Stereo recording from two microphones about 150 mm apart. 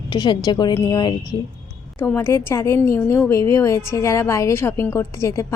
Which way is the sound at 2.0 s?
15° left (ahead or behind).